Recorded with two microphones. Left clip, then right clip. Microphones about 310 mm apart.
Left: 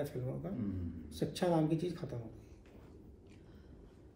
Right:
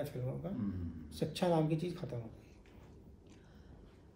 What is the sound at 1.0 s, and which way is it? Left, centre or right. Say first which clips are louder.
A man's voice: even; centre.